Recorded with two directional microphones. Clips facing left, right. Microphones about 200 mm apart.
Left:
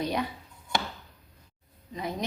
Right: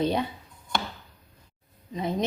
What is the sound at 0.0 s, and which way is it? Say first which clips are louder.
Speech: right 4 dB; 25° right (ahead or behind).